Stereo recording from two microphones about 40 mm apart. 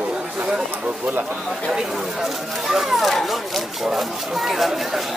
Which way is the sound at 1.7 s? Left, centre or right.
Centre.